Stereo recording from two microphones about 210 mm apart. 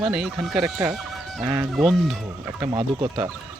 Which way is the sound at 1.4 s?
15° right (ahead or behind).